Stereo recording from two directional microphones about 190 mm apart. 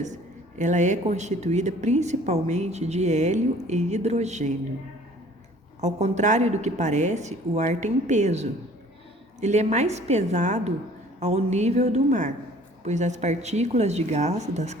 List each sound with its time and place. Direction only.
0.6 s a woman's voice: 40° right (ahead or behind)
5.8 s a woman's voice: 35° right (ahead or behind)